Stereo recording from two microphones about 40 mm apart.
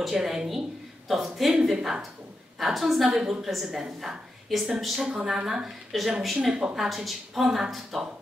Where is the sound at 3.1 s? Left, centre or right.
Centre.